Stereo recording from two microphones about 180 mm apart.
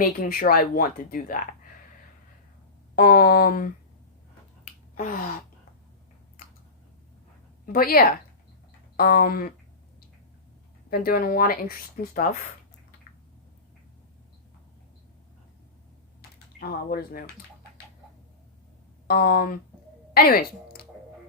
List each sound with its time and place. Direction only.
0.0 s speech: 50° left (ahead or behind)
2.9 s speech: 55° left (ahead or behind)
4.9 s gasp: 50° left (ahead or behind)
7.6 s speech: 55° left (ahead or behind)
10.8 s speech: 55° left (ahead or behind)
16.6 s speech: 60° left (ahead or behind)
19.0 s speech: 55° left (ahead or behind)